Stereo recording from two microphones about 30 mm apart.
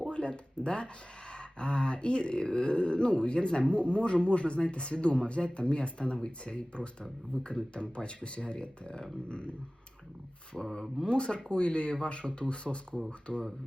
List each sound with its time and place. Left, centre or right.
0.1 s a sound: left
1.3 s speech: left
10.6 s speech: left